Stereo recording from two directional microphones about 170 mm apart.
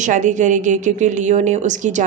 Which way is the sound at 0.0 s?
45° right (ahead or behind).